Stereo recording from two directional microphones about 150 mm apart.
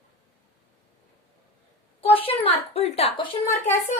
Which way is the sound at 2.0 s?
40° left (ahead or behind).